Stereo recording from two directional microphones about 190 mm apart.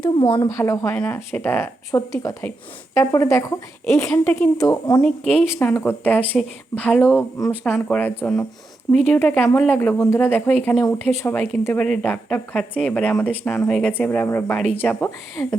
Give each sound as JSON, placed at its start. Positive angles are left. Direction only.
{"t": 0.0, "sound": "speech", "side_deg": 25}
{"t": 0.5, "sound": "speech", "side_deg": 15}